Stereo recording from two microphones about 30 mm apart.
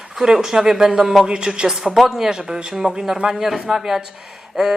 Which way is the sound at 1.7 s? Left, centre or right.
Centre.